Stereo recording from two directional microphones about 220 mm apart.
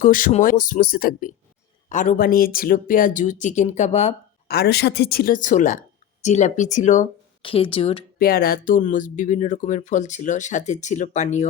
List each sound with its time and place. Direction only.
0.0 s speech: 35° left (ahead or behind)
4.4 s speech: 45° left (ahead or behind); by 8.0 s 25° left (ahead or behind)
8.2 s speech: 40° left (ahead or behind)